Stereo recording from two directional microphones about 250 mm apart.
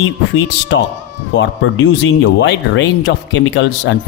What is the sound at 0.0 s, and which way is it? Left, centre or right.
Speech, left.